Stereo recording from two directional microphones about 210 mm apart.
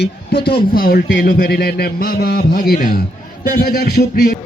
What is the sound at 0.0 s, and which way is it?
Speech, 50° left (ahead or behind).